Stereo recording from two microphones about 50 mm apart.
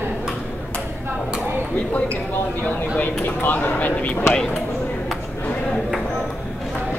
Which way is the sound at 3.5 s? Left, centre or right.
Left.